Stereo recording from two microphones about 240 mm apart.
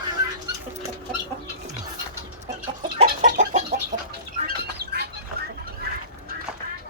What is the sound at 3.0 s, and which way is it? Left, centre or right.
Chicken, right.